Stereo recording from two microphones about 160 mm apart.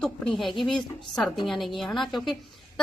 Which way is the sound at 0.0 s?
Centre (ahead or behind).